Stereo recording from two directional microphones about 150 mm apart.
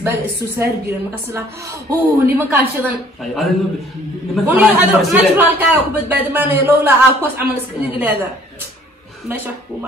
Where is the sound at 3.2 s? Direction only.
Centre (ahead or behind).